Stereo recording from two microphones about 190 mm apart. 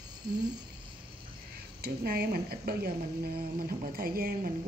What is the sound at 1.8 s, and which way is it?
Speech, 50° right (ahead or behind).